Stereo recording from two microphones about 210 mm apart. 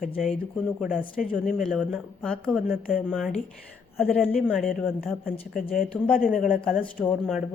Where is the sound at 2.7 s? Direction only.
45° left (ahead or behind).